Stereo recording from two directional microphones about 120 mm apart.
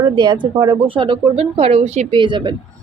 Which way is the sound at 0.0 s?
35° right (ahead or behind).